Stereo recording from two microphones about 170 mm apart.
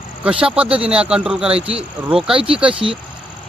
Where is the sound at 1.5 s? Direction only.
35° right (ahead or behind).